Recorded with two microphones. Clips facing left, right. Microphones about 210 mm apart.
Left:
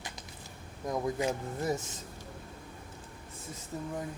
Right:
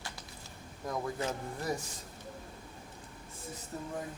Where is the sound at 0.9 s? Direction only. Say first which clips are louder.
Left 4 dB; 15° left (ahead or behind).